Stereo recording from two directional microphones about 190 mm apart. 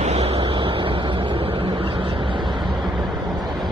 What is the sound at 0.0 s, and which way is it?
Vehicle, 35° right (ahead or behind).